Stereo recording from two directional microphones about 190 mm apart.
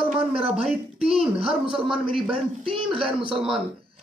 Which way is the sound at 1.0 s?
30° right (ahead or behind).